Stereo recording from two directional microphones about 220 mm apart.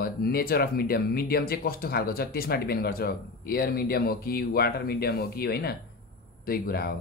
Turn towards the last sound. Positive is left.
turn(degrees=45)  # may be behind; listen again after turning